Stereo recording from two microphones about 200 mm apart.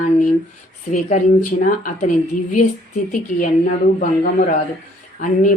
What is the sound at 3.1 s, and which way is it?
A woman's voice, 40° left (ahead or behind).